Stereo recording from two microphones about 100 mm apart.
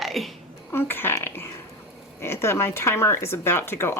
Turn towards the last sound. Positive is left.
turn(degrees=25)  # may be behind; listen again after turning